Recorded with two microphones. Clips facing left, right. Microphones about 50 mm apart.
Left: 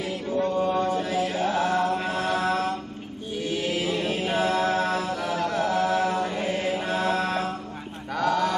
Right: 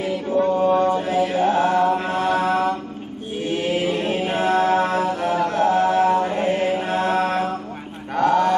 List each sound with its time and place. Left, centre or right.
0.3 s mantra: right
3.3 s chant: right
4.3 s music: right
8.1 s a sound: right